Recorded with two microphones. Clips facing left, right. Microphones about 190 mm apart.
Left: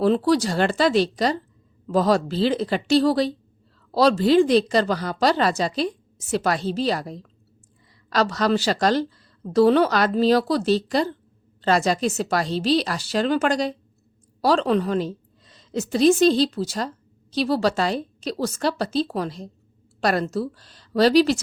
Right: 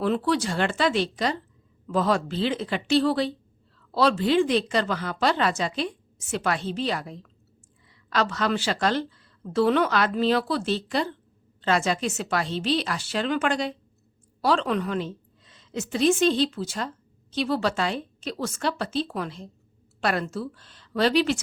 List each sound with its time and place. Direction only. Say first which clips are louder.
0.0 s a woman's voice: left 5 dB; 35° left (ahead or behind)